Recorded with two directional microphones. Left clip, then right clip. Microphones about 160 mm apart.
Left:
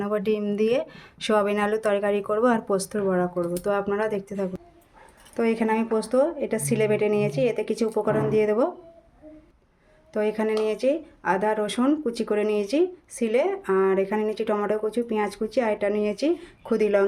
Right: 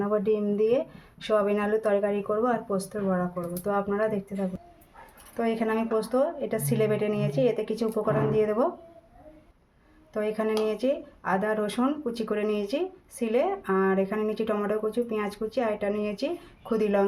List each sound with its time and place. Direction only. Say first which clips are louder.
0.0 s speech: even; 90° left; by 4.4 s 55° left (ahead or behind)
5.4 s speech: left 3 dB; 45° left (ahead or behind)
10.1 s speech: left 3 dB; 45° left (ahead or behind)